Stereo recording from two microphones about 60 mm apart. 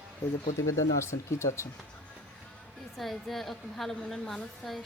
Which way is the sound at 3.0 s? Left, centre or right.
Centre.